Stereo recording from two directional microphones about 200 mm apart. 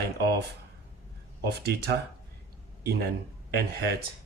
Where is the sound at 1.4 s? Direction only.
55° right (ahead or behind).